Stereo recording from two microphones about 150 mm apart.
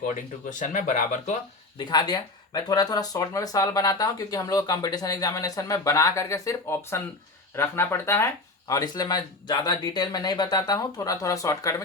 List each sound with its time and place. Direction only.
0.1 s speech: 55° left (ahead or behind)
1.8 s speech: 30° left (ahead or behind)